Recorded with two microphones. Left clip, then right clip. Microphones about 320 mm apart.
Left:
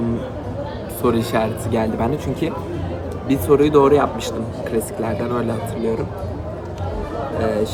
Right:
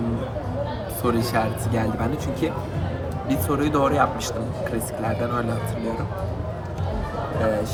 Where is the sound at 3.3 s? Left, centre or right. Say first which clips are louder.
Left 9 dB; centre.